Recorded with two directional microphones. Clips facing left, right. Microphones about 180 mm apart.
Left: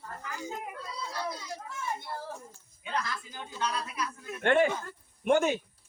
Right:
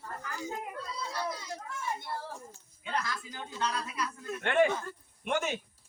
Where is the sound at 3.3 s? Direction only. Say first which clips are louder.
Even; 10° left (ahead or behind).